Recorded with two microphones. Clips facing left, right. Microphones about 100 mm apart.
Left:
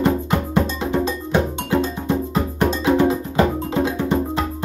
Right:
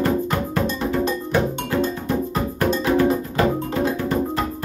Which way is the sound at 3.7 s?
20° left (ahead or behind).